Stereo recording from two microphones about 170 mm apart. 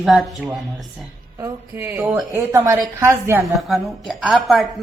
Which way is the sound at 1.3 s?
15° right (ahead or behind).